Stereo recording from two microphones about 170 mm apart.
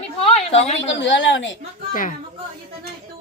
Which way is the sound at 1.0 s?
90° left.